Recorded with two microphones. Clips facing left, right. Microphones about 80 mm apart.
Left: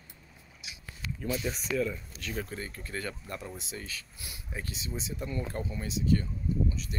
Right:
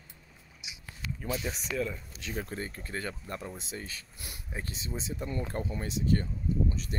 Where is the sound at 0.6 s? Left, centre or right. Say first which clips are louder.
Even; centre.